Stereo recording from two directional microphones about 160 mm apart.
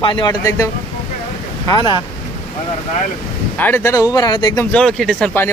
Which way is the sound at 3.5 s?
10° left (ahead or behind).